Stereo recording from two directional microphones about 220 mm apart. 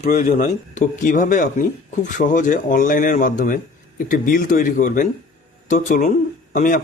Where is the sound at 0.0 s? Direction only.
40° left (ahead or behind).